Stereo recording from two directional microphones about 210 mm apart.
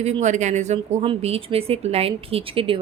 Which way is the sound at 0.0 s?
30° right (ahead or behind).